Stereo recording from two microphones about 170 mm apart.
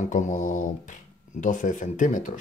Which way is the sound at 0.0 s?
45° left (ahead or behind).